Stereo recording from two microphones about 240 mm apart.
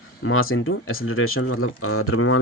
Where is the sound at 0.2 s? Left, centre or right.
Left.